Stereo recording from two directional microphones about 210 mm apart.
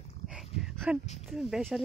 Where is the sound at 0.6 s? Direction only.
Centre (ahead or behind).